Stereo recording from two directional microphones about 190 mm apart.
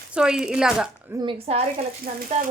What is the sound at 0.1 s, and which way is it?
Speech, 5° right (ahead or behind).